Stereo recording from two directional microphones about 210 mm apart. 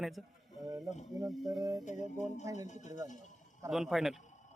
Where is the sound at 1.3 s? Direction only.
Centre (ahead or behind).